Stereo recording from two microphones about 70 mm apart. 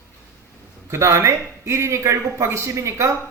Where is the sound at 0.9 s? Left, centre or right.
Right.